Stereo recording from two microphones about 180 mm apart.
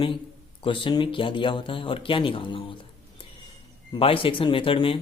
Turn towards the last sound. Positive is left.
turn(degrees=30)  # may be behind; listen again after turning